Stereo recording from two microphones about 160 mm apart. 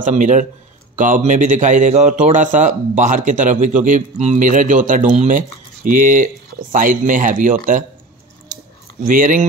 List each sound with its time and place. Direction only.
0.0 s speech: 50° right (ahead or behind)
9.0 s speech: 55° right (ahead or behind)